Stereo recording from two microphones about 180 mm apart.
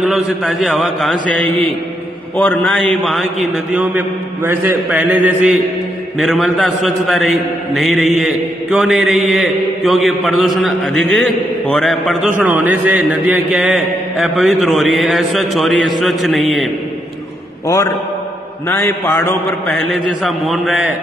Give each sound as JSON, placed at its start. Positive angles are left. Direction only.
{"t": 0.0, "sound": "a man's voice", "side_deg": 0}
{"t": 2.3, "sound": "a man's voice", "side_deg": 10}
{"t": 18.7, "sound": "a man's voice", "side_deg": 15}